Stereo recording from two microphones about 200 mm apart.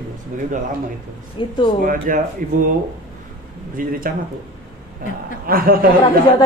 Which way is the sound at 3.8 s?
45° right (ahead or behind).